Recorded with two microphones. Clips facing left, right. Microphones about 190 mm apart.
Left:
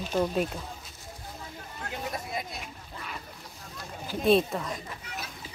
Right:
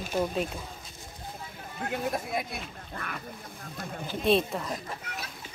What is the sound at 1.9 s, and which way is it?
Speech, 55° right (ahead or behind).